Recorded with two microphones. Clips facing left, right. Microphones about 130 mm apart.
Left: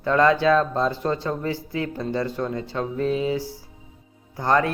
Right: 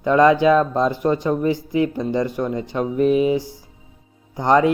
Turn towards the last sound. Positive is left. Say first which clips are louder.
# right 5 dB
turn(degrees=-20)  # may be behind; listen again after turning